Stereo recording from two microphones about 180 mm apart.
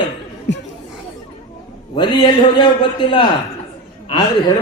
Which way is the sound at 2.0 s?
25° left (ahead or behind).